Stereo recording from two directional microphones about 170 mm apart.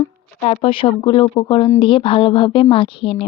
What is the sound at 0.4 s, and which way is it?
Speech, 35° left (ahead or behind).